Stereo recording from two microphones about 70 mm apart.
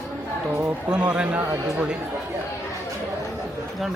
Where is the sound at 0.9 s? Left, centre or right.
Centre.